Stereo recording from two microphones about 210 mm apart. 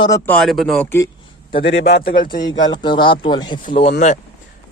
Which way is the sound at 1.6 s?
55° left (ahead or behind).